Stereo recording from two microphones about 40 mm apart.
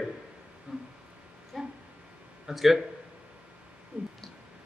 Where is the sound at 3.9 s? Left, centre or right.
Right.